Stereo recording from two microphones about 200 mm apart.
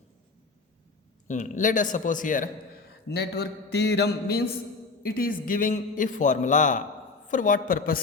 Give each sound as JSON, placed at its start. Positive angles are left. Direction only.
{"t": 1.3, "sound": "a man's voice", "side_deg": 40}
{"t": 3.1, "sound": "a man's voice", "side_deg": 55}